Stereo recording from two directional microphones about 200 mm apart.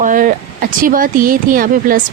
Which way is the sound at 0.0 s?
40° right (ahead or behind).